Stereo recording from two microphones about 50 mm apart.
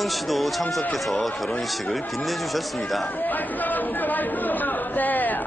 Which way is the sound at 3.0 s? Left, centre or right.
Left.